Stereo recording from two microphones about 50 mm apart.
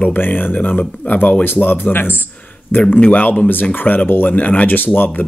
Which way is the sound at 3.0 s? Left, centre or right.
Left.